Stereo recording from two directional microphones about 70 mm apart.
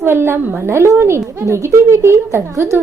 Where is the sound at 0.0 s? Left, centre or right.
Right.